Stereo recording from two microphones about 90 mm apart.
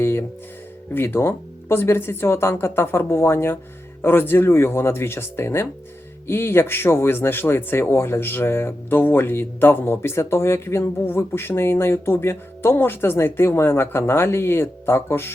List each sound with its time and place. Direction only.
0.0 s music: 25° left (ahead or behind)
0.9 s speech: 25° left (ahead or behind)